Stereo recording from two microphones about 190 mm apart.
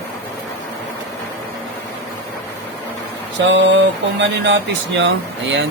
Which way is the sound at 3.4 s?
70° right (ahead or behind).